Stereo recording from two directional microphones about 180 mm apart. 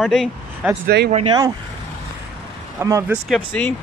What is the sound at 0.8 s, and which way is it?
Speech, 60° right (ahead or behind).